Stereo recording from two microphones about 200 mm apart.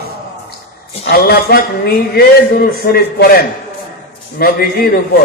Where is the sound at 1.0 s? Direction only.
50° left (ahead or behind).